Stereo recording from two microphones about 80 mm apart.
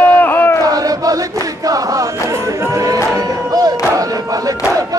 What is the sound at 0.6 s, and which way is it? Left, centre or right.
Battle cry, right.